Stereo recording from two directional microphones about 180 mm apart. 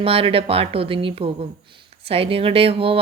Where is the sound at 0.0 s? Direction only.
30° right (ahead or behind).